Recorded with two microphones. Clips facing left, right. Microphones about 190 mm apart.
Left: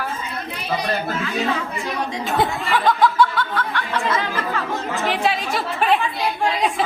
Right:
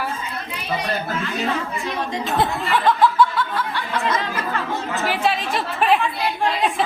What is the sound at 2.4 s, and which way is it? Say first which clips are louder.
Snicker: even; centre (ahead or behind).